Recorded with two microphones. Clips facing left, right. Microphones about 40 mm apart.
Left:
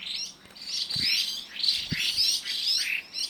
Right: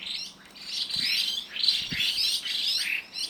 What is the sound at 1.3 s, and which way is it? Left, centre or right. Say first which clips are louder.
Bird: right 2 dB; right.